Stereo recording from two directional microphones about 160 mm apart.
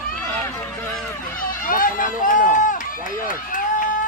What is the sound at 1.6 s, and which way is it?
Speech, 60° left (ahead or behind).